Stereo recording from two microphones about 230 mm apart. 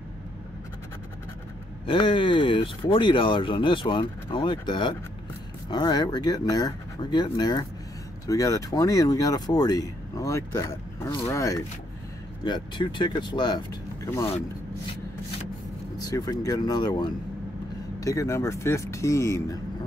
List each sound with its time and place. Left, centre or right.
1.9 s speech: left
16.0 s speech: centre